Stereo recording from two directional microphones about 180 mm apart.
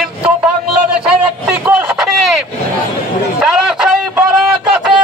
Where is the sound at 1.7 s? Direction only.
5° right (ahead or behind).